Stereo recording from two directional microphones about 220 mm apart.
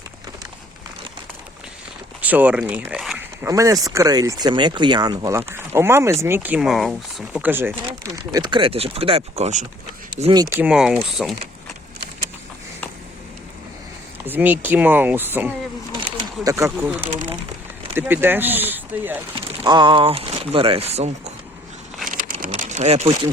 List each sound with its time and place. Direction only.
2.2 s speech: 5° right (ahead or behind)
3.4 s speech: 15° right (ahead or behind)
10.5 s speech: 5° right (ahead or behind)
14.3 s speech: 10° right (ahead or behind)
19.4 s speech: 20° right (ahead or behind)
22.0 s a sound: 35° right (ahead or behind)